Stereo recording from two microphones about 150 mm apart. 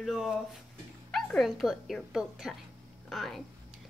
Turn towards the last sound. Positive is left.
turn(degrees=0)  # may be behind; listen again after turning